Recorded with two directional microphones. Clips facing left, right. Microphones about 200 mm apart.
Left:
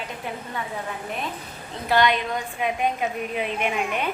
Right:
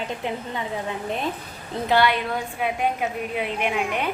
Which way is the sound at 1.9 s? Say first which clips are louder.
Even; 10° right (ahead or behind).